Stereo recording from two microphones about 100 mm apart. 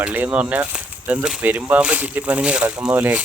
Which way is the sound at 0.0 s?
15° right (ahead or behind).